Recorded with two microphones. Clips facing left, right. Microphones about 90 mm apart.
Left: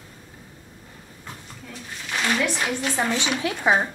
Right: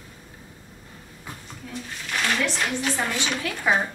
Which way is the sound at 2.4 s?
15° left (ahead or behind).